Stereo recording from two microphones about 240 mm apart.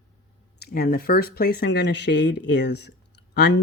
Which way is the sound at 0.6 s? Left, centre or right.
Left.